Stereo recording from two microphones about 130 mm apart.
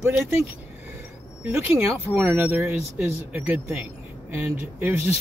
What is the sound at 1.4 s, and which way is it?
Speech, 15° right (ahead or behind).